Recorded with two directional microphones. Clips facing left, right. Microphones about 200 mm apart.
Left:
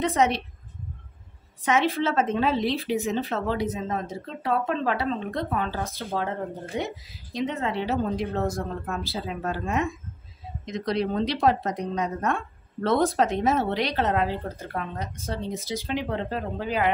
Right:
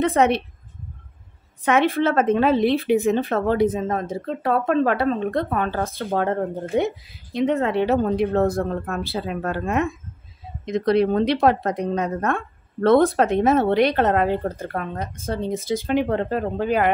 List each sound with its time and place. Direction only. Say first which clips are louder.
0.0 s a woman's voice: right 5 dB; 55° right (ahead or behind)
1.6 s a woman's voice: right 5 dB; 60° right (ahead or behind)